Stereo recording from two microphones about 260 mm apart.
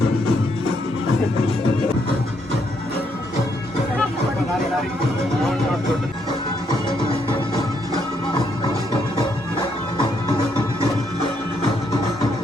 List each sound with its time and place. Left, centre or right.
8.9 s music: centre